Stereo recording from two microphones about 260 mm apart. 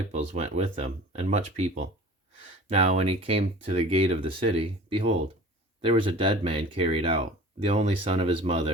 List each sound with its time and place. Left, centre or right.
0.1 s speech: right